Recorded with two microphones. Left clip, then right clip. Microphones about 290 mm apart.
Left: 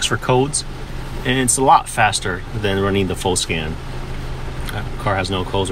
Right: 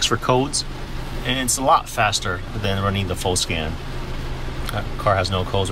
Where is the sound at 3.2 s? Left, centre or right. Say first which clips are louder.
Left 2 dB; right.